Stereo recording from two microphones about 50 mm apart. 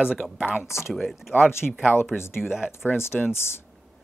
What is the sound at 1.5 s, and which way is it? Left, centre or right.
Speech, left.